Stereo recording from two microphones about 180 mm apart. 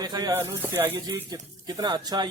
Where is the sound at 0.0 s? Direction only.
20° right (ahead or behind).